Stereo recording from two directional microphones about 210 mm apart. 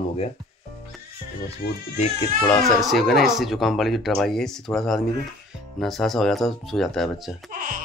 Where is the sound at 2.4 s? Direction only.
Centre (ahead or behind).